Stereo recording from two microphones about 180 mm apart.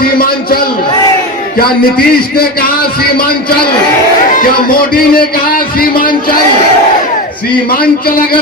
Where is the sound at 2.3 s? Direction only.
55° left (ahead or behind).